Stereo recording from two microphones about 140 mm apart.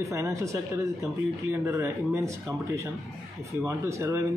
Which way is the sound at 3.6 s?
20° right (ahead or behind).